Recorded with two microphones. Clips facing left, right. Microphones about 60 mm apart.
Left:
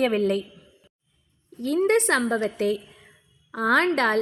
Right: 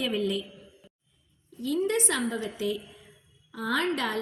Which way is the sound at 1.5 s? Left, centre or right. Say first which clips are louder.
Left 6 dB; left.